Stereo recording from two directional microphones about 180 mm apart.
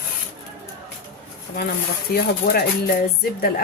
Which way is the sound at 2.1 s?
55° left (ahead or behind).